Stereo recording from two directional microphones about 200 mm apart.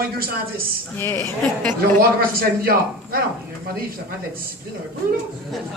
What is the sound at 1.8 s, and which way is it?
Speech, 45° right (ahead or behind).